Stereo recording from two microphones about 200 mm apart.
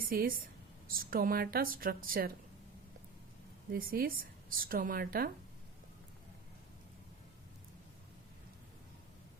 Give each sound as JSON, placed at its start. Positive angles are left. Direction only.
{"t": 0.1, "sound": "speech", "side_deg": -45}
{"t": 3.7, "sound": "speech", "side_deg": -45}